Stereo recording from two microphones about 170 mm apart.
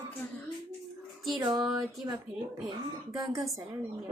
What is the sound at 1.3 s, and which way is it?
Speech, 25° right (ahead or behind).